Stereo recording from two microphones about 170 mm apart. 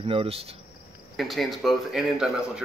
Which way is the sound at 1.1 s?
Centre (ahead or behind).